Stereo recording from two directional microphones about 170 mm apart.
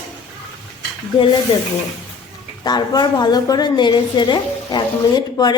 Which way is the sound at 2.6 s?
25° left (ahead or behind).